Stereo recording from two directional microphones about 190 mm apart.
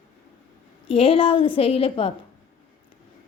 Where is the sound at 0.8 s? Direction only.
30° left (ahead or behind).